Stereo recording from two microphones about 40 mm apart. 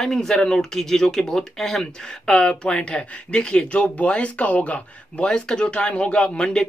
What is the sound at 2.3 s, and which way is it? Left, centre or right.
Speech, left.